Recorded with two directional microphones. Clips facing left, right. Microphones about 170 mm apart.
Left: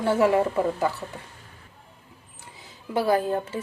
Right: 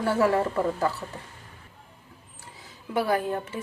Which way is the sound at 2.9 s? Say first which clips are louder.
Left 3 dB; 30° left (ahead or behind).